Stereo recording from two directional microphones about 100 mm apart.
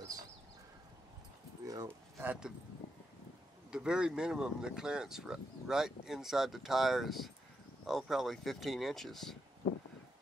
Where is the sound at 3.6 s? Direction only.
10° right (ahead or behind).